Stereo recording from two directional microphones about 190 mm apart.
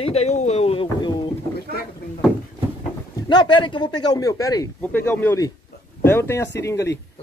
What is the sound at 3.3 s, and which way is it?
Speech, 25° left (ahead or behind).